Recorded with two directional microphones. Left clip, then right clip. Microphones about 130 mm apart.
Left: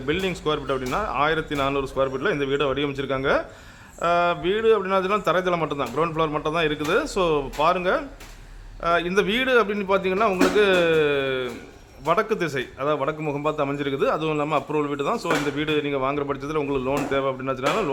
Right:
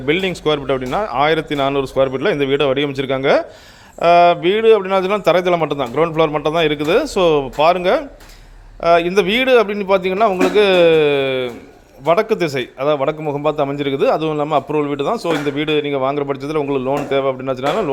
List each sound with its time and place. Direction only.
0.0 s speech: 40° right (ahead or behind)